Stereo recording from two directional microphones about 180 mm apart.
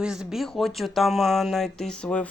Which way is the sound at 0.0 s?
5° right (ahead or behind).